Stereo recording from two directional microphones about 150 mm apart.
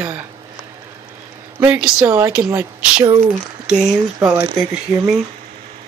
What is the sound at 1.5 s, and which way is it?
Speech, 10° right (ahead or behind).